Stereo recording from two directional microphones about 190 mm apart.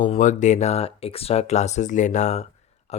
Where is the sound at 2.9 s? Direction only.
35° left (ahead or behind).